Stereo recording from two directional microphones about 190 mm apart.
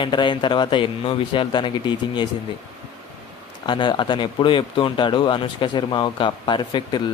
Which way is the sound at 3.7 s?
25° left (ahead or behind).